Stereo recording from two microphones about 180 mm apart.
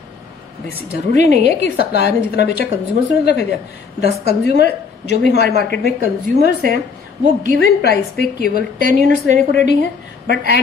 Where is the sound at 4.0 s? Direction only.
65° left (ahead or behind).